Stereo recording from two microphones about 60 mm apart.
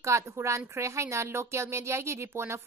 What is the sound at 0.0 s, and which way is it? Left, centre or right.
A woman's voice, right.